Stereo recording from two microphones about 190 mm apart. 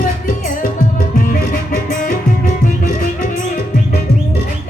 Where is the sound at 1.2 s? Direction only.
45° left (ahead or behind).